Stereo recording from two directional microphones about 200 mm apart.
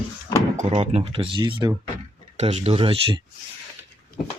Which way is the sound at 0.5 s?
35° right (ahead or behind).